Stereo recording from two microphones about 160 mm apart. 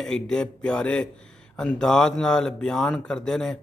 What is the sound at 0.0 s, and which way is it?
Speech, 5° left (ahead or behind).